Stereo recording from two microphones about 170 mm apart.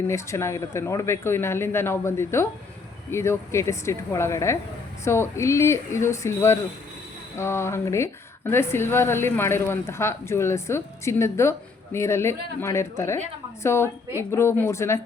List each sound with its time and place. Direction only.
0.1 s a woman's voice: 15° left (ahead or behind)